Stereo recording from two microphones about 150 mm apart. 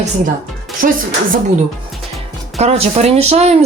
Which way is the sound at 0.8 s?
65° right (ahead or behind).